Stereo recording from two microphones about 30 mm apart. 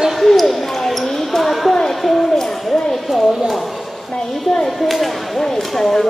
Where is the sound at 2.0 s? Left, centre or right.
Centre.